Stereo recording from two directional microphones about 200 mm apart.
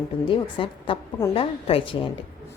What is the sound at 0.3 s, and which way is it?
A woman's voice, 25° left (ahead or behind).